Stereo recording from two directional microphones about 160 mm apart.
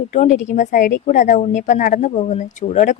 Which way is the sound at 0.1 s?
50° left (ahead or behind).